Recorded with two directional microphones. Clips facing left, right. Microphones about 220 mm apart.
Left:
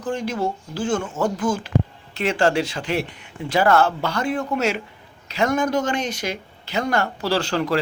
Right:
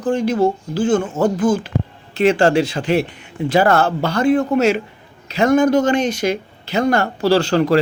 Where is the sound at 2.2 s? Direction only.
30° right (ahead or behind).